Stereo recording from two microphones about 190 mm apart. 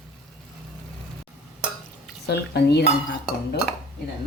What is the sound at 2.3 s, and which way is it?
Cutlery, 60° left (ahead or behind).